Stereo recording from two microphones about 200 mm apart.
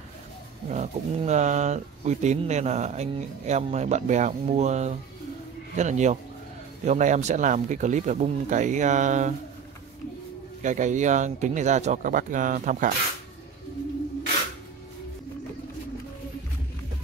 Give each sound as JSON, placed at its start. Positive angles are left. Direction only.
{"t": 0.7, "sound": "speech", "side_deg": -35}
{"t": 10.6, "sound": "speech", "side_deg": -40}